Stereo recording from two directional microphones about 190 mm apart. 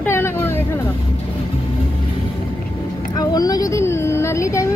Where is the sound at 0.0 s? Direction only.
15° left (ahead or behind).